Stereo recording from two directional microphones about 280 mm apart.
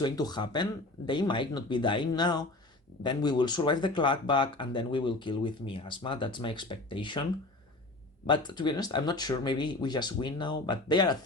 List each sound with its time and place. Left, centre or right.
0.0 s speech: centre
8.3 s speech: centre